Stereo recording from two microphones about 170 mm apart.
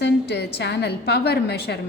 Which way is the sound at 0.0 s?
75° left (ahead or behind).